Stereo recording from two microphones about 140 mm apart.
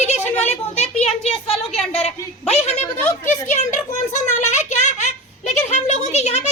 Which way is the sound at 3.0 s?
15° left (ahead or behind).